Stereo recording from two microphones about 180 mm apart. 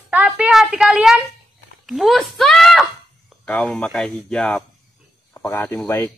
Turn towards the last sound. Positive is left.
turn(degrees=15)  # may be behind; listen again after turning